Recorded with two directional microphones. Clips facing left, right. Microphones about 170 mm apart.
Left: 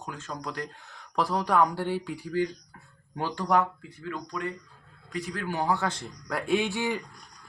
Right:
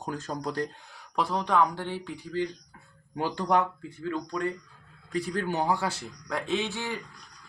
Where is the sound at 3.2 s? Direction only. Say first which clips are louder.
Even; 15° right (ahead or behind).